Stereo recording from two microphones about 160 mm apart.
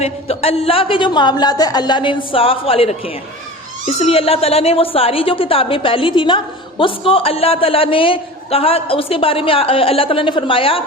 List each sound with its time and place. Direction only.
0.0 s a woman's voice: 40° left (ahead or behind)